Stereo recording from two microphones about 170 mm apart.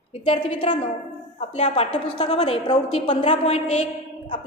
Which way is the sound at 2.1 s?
35° left (ahead or behind).